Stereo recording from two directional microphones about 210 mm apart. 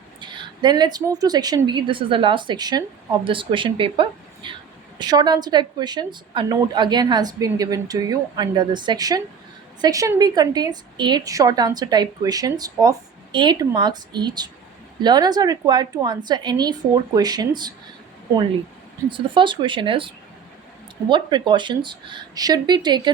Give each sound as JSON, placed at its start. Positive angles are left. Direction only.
{"t": 0.2, "sound": "a woman's voice", "side_deg": -20}
{"t": 19.1, "sound": "a woman's voice", "side_deg": -25}